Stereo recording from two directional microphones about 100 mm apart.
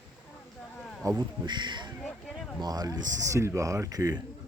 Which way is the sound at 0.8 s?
10° left (ahead or behind).